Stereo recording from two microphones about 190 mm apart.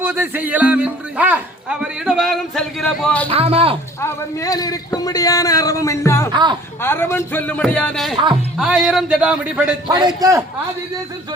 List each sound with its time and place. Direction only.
0.0 s speech: 10° right (ahead or behind)
3.2 s speech: 30° right (ahead or behind)
4.0 s a man's voice: 20° left (ahead or behind)
6.3 s a man's voice: 25° right (ahead or behind)
6.8 s a man's voice: 10° left (ahead or behind); by 9.7 s 5° right (ahead or behind)
9.9 s a man's voice: 20° right (ahead or behind)